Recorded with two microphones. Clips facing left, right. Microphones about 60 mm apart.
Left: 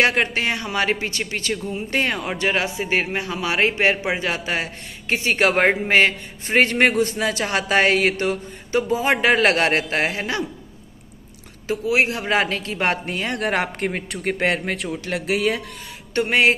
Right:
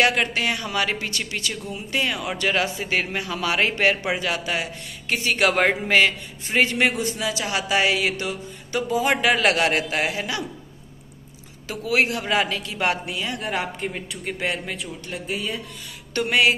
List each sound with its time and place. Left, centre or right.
0.0 s a man's voice: left
2.3 s a man's voice: left
11.6 s speech: left
16.2 s a man's voice: left